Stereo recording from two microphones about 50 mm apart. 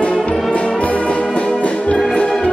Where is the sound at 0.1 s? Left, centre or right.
Centre.